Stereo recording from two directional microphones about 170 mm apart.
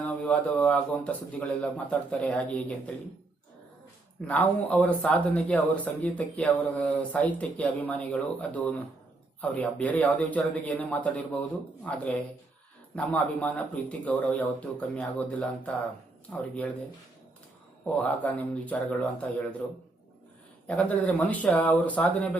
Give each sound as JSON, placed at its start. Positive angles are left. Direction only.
{"t": 0.0, "sound": "speech", "side_deg": 10}
{"t": 4.3, "sound": "speech", "side_deg": 10}
{"t": 17.8, "sound": "speech", "side_deg": 10}
{"t": 20.7, "sound": "speech", "side_deg": 5}